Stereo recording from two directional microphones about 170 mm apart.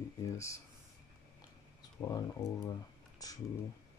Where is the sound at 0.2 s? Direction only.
15° left (ahead or behind).